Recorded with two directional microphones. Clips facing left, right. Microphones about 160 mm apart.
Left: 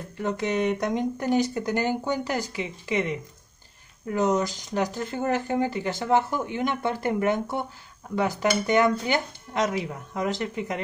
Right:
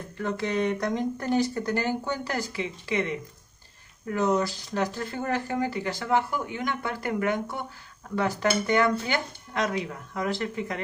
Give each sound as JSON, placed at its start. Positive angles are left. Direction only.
{"t": 0.2, "sound": "speech", "side_deg": 15}